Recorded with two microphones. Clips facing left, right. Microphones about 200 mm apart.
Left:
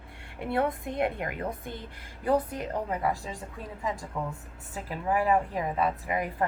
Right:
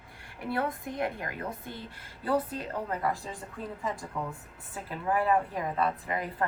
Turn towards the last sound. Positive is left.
turn(degrees=15)  # may be behind; listen again after turning